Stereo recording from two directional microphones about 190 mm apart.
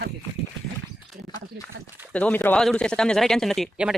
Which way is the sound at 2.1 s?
10° left (ahead or behind).